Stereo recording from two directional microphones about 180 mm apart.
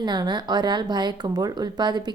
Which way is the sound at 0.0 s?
25° right (ahead or behind).